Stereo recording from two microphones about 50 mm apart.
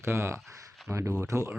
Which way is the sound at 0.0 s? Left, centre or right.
Right.